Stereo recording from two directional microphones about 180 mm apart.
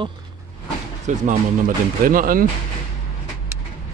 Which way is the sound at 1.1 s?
45° right (ahead or behind).